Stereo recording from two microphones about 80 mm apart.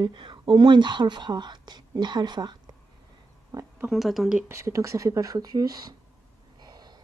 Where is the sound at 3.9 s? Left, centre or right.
Centre.